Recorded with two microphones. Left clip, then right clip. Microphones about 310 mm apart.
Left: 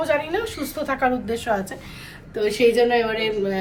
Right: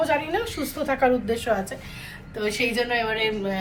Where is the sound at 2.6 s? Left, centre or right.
Centre.